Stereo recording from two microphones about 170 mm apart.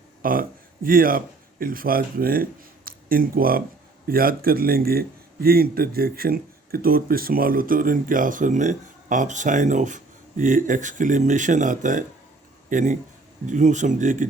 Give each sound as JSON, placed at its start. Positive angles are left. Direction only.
{"t": 0.2, "sound": "a man's voice", "side_deg": -55}